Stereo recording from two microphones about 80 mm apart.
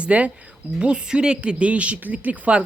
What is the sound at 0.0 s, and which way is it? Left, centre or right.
Speech, centre.